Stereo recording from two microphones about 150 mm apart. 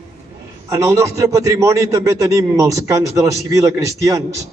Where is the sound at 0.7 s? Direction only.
20° right (ahead or behind).